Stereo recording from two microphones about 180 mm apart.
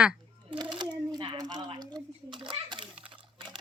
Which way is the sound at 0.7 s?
25° right (ahead or behind).